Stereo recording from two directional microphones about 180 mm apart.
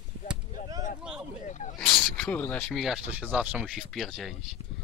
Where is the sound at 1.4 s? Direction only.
40° left (ahead or behind).